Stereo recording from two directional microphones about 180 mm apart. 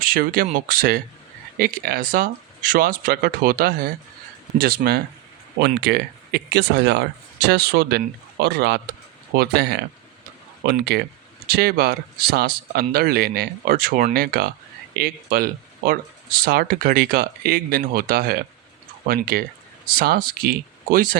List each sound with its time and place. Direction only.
0.0 s speech: 55° right (ahead or behind)